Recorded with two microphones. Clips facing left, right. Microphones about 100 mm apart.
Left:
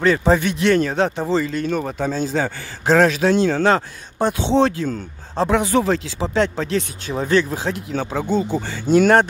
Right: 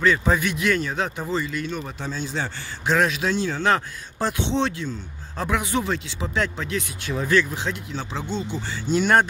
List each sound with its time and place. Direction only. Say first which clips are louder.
0.2 s speech: left 5 dB; 30° left (ahead or behind)
1.7 s speech: left 9 dB; 50° left (ahead or behind)
2.9 s speech: left 7 dB; 35° left (ahead or behind)
3.3 s speech: left 8 dB; 60° left (ahead or behind)
3.6 s speech: left 4 dB; 25° left (ahead or behind)
4.6 s speech: left 7 dB; 40° left (ahead or behind)
7.9 s speech: left 8 dB; 50° left (ahead or behind)